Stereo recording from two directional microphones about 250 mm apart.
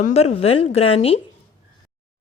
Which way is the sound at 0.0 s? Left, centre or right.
Left.